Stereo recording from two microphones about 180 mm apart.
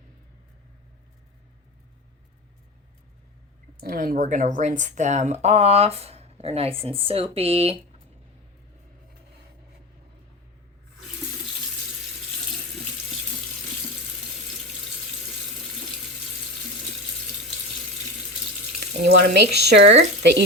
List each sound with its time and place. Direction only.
3.8 s speech: 55° right (ahead or behind); by 7.8 s 35° right (ahead or behind)
18.8 s speech: 65° right (ahead or behind)